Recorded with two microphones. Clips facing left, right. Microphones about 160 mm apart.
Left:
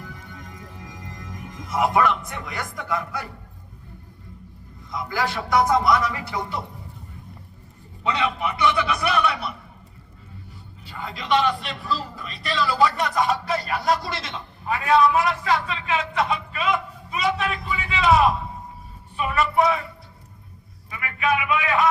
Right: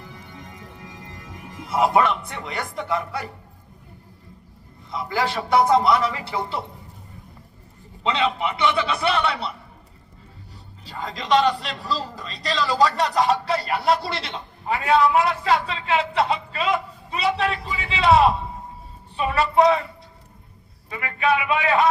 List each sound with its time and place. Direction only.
1.0 s a man's voice: 25° right (ahead or behind)
4.9 s a man's voice: 25° right (ahead or behind)
8.0 s a man's voice: 25° right (ahead or behind)
10.8 s speech: 40° right (ahead or behind)
20.9 s speech: 30° right (ahead or behind)